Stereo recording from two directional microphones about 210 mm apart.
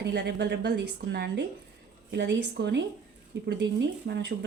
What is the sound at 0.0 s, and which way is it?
A woman's voice, 55° right (ahead or behind).